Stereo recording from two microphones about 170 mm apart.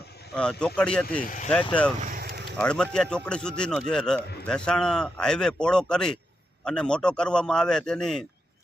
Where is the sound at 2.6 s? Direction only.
5° left (ahead or behind).